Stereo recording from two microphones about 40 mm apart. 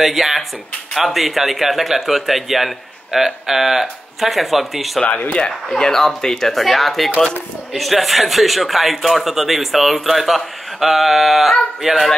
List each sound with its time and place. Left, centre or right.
0.0 s speech: centre
5.0 s speech: left
5.8 s speech: centre